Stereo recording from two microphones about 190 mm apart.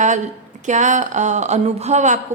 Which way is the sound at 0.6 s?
40° right (ahead or behind).